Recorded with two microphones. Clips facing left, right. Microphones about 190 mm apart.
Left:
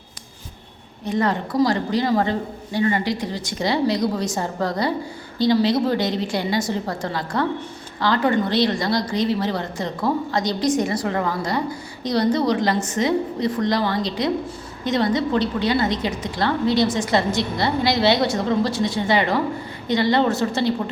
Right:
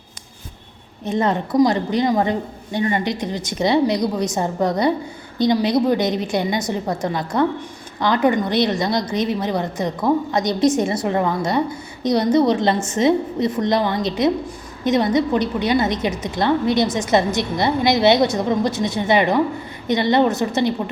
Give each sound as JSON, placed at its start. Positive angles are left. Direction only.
{"t": 1.0, "sound": "a woman's voice", "side_deg": -20}